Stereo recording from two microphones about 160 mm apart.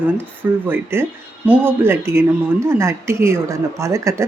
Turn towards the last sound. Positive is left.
turn(degrees=-20)  # may be behind; listen again after turning